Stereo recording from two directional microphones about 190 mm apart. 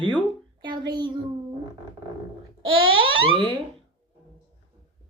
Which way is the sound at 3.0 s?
25° right (ahead or behind).